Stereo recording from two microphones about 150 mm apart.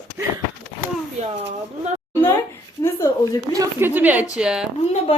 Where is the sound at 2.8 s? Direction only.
20° left (ahead or behind).